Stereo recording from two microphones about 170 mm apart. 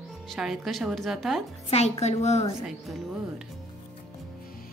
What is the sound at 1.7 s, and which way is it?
Speech, 40° left (ahead or behind).